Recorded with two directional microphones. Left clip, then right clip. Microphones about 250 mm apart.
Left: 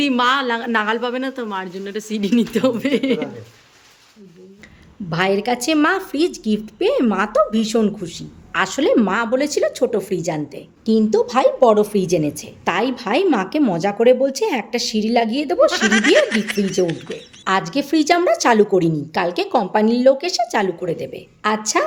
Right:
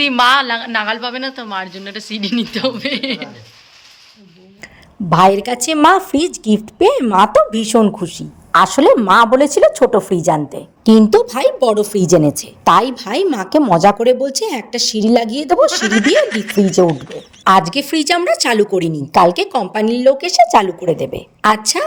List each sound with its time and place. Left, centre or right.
0.0 s a woman's voice: centre
5.1 s a woman's voice: right
10.8 s a woman's voice: right
15.7 s speech: centre
17.4 s a woman's voice: right